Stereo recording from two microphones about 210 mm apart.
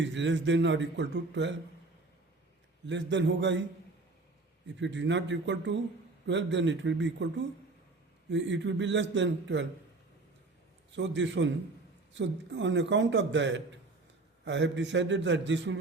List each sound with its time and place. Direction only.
0.0 s a man's voice: 60° right (ahead or behind)
2.8 s a man's voice: 60° right (ahead or behind)
4.6 s a man's voice: 60° right (ahead or behind)
8.3 s a man's voice: 60° right (ahead or behind)
10.9 s a man's voice: 60° right (ahead or behind)